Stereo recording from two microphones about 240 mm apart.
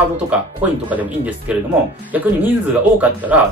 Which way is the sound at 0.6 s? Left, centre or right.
Centre.